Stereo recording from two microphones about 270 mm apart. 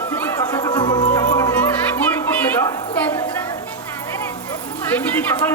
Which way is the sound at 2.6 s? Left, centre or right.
Centre.